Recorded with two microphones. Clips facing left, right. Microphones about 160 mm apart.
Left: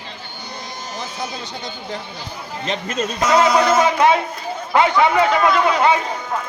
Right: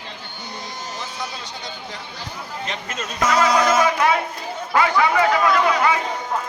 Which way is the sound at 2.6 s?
25° left (ahead or behind).